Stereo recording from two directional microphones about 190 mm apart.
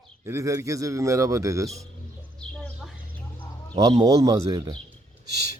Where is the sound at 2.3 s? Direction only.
5° left (ahead or behind).